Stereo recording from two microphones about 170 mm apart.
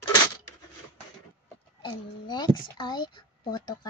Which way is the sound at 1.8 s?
25° left (ahead or behind).